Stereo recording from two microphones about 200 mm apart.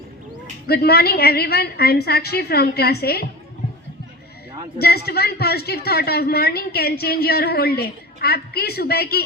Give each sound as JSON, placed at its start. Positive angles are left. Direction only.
{"t": 0.7, "sound": "a woman's voice", "side_deg": 50}
{"t": 4.8, "sound": "a woman's voice", "side_deg": 50}